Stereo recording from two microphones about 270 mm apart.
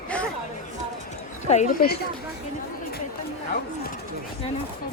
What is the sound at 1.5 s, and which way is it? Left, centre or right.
Speech, left.